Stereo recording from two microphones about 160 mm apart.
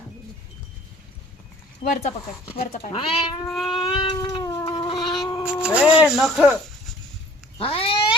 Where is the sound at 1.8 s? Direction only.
45° left (ahead or behind).